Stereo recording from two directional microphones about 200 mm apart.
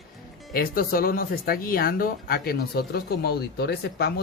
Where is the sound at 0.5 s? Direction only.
45° left (ahead or behind).